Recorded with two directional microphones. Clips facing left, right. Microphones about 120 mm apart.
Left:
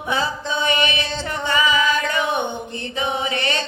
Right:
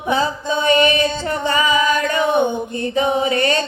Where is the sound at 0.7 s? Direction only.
40° right (ahead or behind).